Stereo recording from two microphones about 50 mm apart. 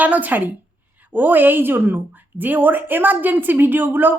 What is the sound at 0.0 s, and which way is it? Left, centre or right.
A woman's voice, right.